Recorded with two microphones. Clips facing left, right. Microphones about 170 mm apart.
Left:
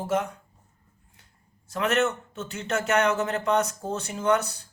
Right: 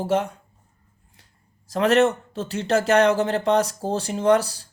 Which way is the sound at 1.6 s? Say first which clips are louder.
Right 7 dB; 35° right (ahead or behind).